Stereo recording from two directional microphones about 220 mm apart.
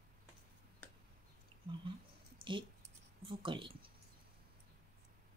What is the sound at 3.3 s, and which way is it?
Speech, 20° right (ahead or behind).